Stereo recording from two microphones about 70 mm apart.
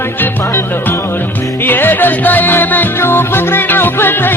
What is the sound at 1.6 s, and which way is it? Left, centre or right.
Music, left.